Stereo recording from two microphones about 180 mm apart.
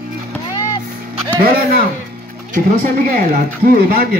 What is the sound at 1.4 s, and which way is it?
Speech, 55° right (ahead or behind).